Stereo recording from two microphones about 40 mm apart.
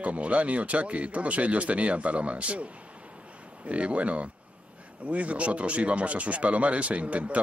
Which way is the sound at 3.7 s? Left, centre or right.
Right.